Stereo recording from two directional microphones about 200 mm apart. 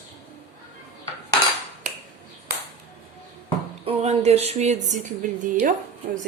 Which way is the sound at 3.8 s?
30° right (ahead or behind).